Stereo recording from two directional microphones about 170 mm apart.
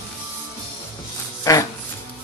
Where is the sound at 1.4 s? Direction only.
20° left (ahead or behind).